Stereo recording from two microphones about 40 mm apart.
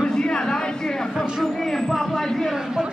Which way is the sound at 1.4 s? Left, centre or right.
Centre.